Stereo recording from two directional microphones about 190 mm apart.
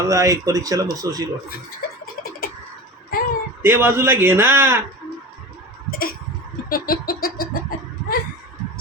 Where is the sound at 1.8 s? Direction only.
55° left (ahead or behind).